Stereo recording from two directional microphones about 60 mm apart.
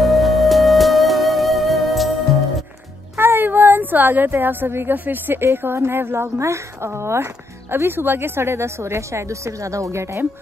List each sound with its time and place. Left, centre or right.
0.0 s music: centre
3.2 s a woman's voice: right